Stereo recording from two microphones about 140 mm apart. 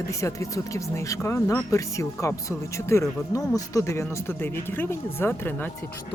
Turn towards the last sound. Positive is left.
turn(degrees=15)  # may be behind; listen again after turning